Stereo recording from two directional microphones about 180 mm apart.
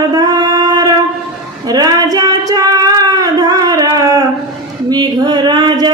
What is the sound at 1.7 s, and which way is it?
Child singing, 20° right (ahead or behind).